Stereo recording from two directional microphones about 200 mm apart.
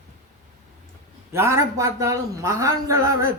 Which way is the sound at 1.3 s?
15° right (ahead or behind).